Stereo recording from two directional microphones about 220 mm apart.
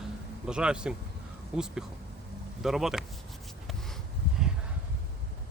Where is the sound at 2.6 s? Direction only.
Centre (ahead or behind).